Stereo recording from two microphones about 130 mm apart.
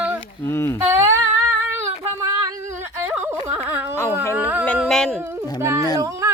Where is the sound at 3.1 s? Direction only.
15° right (ahead or behind).